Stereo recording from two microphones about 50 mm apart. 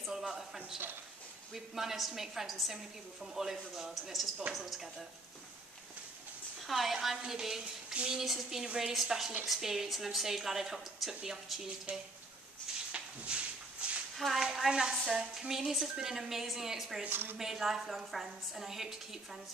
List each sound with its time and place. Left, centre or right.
0.1 s a sound: centre
1.5 s a woman's voice: centre
6.7 s a woman's voice: centre
7.9 s speech: centre
8.2 s a woman's voice: centre
11.9 s speech: right
12.9 s walk: right
14.1 s a woman's voice: centre
17.1 s a woman's voice: right
17.4 s a woman's voice: centre